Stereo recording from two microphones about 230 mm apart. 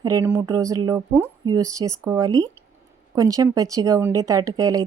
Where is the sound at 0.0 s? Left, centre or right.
Centre.